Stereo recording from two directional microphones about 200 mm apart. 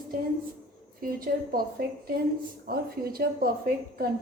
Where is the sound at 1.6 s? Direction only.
45° right (ahead or behind).